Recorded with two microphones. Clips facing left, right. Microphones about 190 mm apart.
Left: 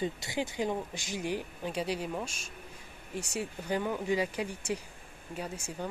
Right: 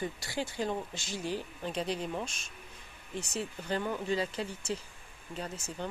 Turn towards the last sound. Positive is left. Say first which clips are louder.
# left 1 dB
turn(degrees=10)  # may be behind; listen again after turning